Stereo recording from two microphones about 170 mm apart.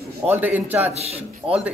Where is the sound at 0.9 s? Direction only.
40° right (ahead or behind).